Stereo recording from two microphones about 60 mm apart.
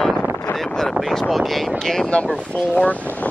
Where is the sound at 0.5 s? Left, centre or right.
Left.